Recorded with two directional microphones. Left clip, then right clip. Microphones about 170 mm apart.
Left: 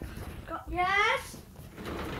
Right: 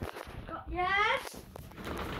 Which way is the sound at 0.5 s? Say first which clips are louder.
Left 4 dB; 45° left (ahead or behind).